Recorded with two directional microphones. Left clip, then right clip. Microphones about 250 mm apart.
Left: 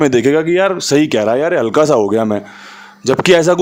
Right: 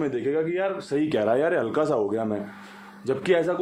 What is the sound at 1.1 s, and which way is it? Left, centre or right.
Speech, left.